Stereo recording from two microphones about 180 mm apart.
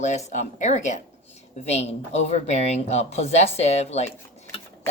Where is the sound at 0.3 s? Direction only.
40° left (ahead or behind).